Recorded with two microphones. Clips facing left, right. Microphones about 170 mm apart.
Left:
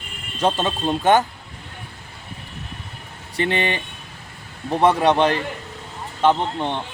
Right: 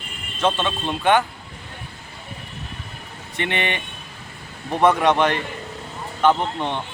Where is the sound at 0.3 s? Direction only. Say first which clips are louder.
Left 1 dB; 40° left (ahead or behind).